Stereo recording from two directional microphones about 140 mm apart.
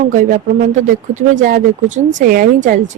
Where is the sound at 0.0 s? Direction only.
70° right (ahead or behind).